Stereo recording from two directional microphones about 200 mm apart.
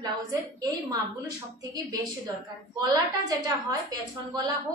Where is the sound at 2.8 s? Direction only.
20° right (ahead or behind).